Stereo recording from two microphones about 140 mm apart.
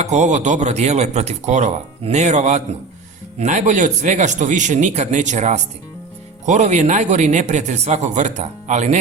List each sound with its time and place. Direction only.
0.0 s speech: 55° right (ahead or behind)